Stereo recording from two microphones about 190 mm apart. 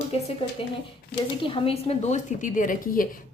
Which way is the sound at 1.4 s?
30° left (ahead or behind).